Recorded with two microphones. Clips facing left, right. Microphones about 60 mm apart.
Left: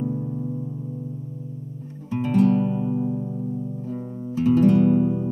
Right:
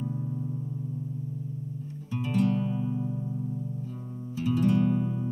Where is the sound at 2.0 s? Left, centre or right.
Left.